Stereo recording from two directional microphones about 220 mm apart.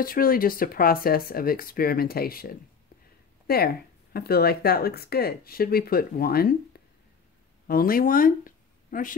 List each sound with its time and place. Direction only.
0.0 s speech: 40° left (ahead or behind)